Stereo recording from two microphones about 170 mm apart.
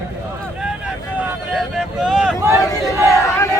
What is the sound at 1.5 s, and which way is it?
Vehicle, centre (ahead or behind).